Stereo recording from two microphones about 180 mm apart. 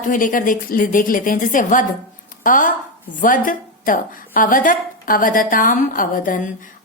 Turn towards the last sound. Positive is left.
turn(degrees=50)  # may be behind; listen again after turning